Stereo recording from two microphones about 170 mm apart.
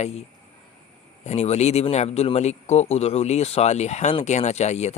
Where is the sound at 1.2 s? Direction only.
40° left (ahead or behind).